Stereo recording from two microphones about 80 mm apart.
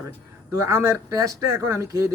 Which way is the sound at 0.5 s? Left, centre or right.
Right.